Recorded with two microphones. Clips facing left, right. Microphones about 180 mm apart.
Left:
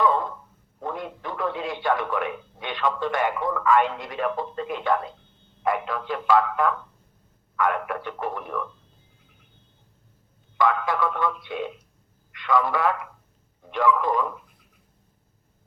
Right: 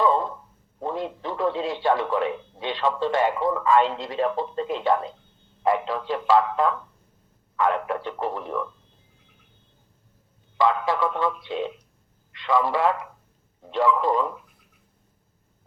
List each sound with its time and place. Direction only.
0.0 s a sound: 25° right (ahead or behind)
0.8 s speech: 25° right (ahead or behind)
10.6 s a man's voice: 25° right (ahead or behind)